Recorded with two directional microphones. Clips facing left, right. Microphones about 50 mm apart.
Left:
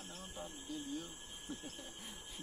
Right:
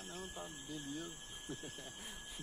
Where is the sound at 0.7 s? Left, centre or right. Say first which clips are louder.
Left 2 dB; centre.